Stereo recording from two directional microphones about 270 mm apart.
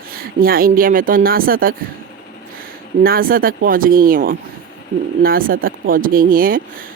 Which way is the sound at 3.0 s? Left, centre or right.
Right.